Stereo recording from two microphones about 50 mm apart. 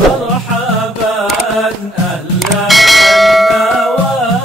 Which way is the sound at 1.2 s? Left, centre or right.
Centre.